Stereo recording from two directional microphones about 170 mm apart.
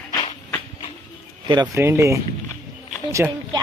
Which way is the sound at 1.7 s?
15° right (ahead or behind).